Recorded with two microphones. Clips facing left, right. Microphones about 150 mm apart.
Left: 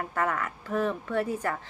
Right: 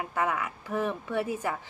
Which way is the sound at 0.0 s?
10° right (ahead or behind).